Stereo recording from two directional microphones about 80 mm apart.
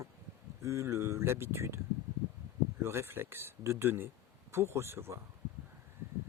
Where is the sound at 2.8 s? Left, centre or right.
Right.